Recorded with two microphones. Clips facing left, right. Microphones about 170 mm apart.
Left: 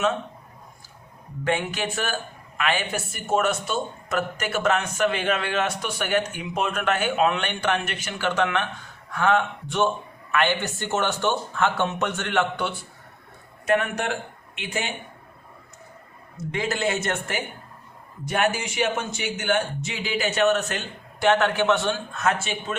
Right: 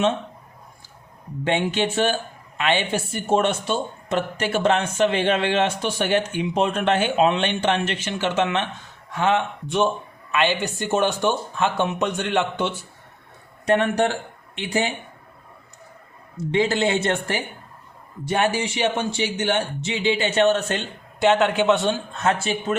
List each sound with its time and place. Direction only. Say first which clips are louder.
1.5 s speech: right 4 dB; 25° right (ahead or behind)
13.7 s a man's voice: right 4 dB; 35° right (ahead or behind)
16.5 s speech: right 5 dB; 25° right (ahead or behind)